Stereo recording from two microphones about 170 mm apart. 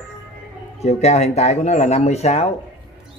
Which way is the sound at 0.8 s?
40° left (ahead or behind).